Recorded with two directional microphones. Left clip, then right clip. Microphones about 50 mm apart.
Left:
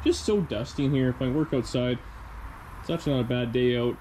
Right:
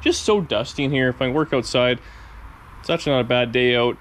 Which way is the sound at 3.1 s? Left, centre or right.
Left.